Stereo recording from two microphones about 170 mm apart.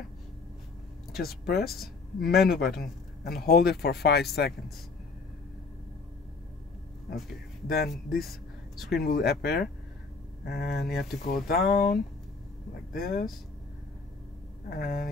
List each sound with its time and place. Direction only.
1.1 s speech: 65° left (ahead or behind)
7.6 s speech: 65° left (ahead or behind)
11.0 s speech: 60° left (ahead or behind)
14.8 s speech: 60° left (ahead or behind)